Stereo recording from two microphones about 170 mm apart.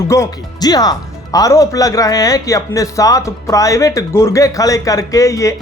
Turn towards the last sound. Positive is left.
turn(degrees=20)  # may be behind; listen again after turning